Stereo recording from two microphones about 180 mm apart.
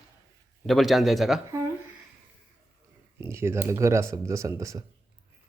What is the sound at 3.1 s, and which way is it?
Speech, 15° right (ahead or behind).